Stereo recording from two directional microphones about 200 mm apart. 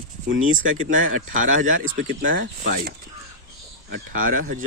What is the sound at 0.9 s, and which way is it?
Speech, 40° right (ahead or behind).